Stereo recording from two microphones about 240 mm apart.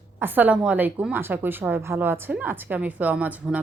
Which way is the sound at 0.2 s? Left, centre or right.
Centre.